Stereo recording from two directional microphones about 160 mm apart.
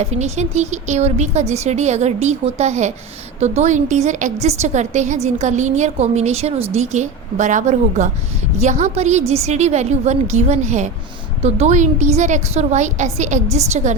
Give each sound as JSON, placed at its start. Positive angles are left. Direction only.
{"t": 0.0, "sound": "a woman's voice", "side_deg": -45}